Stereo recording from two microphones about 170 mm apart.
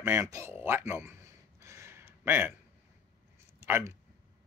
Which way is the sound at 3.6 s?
15° right (ahead or behind).